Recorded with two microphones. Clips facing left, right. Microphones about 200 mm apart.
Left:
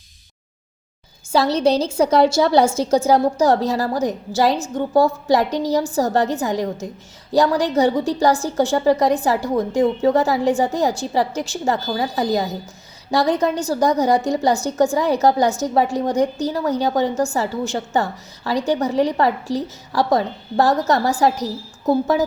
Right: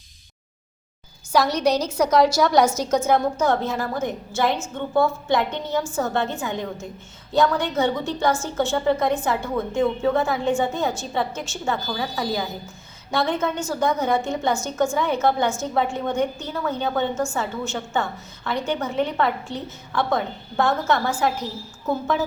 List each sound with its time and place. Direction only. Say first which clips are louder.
1.3 s a woman's voice: left 3 dB; 25° left (ahead or behind)